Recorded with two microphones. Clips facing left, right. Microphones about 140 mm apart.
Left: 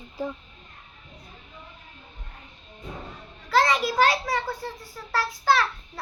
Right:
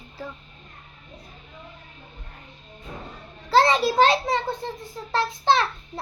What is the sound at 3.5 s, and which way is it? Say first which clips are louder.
A child's voice: right 3 dB; 30° right (ahead or behind).